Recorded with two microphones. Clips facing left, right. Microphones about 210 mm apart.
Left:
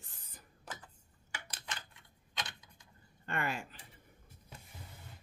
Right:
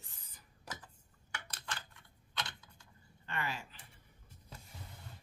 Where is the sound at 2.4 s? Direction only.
15° left (ahead or behind).